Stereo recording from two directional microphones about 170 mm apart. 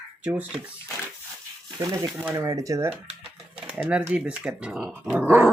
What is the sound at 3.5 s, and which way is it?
Speech, 5° right (ahead or behind).